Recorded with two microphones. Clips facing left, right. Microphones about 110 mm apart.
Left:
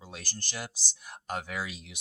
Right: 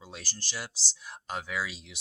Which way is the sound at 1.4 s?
50° left (ahead or behind).